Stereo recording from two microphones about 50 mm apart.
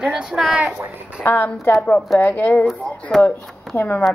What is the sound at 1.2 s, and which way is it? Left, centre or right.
Speech, left.